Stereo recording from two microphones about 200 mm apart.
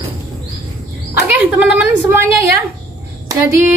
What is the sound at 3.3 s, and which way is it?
Speech, 15° right (ahead or behind).